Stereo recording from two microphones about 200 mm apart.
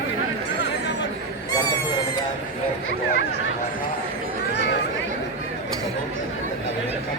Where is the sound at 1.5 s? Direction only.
20° left (ahead or behind).